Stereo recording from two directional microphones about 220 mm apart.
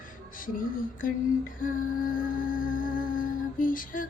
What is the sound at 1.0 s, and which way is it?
Music, 40° left (ahead or behind).